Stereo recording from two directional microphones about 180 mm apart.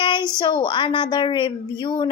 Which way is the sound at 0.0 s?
25° left (ahead or behind).